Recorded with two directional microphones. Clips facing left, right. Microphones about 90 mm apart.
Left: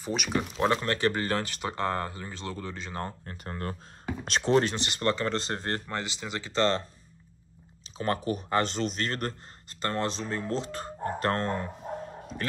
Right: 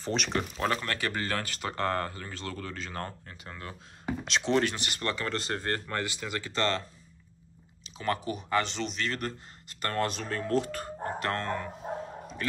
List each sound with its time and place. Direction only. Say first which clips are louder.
0.0 s speech: left 1 dB; 10° left (ahead or behind)
0.6 s speech: left 7 dB; 25° left (ahead or behind)
3.3 s speech: left 6 dB; 40° left (ahead or behind)
4.5 s speech: left 4 dB; 30° left (ahead or behind)
7.8 s speech: left 2 dB; 35° left (ahead or behind)
9.8 s speech: left 1 dB; 25° left (ahead or behind)